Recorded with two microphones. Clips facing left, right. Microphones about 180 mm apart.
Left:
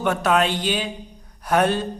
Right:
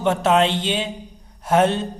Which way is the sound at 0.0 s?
25° right (ahead or behind).